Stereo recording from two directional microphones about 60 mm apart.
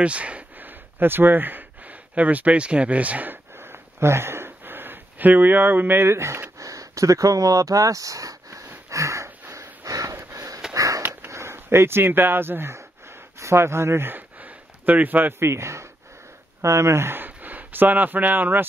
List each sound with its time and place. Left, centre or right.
0.0 s speech: right
3.5 s a sound: right
6.6 s a sound: right
10.3 s sniff: right
11.2 s speech: right
15.4 s speech: right